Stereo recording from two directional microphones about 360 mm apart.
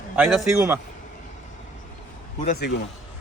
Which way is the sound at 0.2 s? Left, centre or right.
Centre.